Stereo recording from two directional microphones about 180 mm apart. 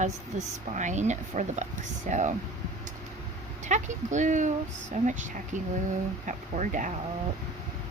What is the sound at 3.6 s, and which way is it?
Speech, 45° right (ahead or behind).